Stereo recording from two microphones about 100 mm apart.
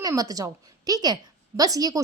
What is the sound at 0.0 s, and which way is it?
A woman's voice, 35° right (ahead or behind).